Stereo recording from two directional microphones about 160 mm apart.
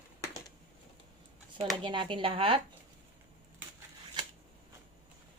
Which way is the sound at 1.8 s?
30° right (ahead or behind).